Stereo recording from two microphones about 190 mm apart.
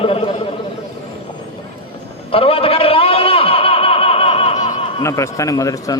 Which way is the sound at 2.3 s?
30° left (ahead or behind).